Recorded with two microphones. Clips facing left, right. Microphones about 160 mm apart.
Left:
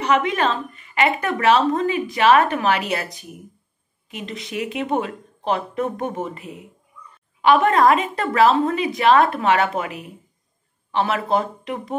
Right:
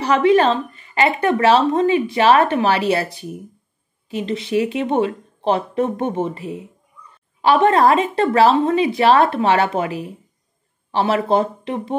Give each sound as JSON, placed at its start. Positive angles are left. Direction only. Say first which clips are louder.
{"t": 0.0, "sound": "a woman's voice", "louder": "right 6 dB", "side_deg": -35}